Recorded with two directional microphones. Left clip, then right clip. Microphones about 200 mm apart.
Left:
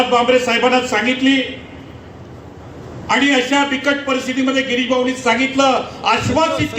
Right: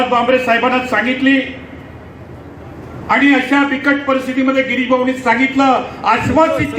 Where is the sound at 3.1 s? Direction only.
50° left (ahead or behind).